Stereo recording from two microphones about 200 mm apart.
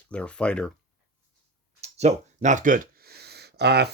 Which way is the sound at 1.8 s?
35° right (ahead or behind).